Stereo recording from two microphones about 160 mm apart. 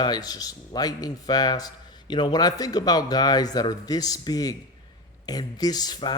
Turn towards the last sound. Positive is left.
turn(degrees=25)  # may be behind; listen again after turning